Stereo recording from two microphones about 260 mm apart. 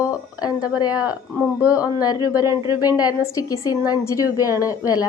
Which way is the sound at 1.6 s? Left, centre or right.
Centre.